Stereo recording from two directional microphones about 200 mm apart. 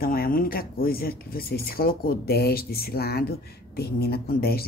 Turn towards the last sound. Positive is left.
turn(degrees=50)  # may be behind; listen again after turning